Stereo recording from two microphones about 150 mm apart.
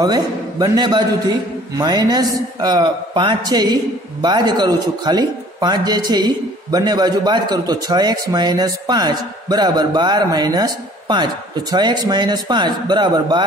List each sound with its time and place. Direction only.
0.0 s a man's voice: 25° right (ahead or behind)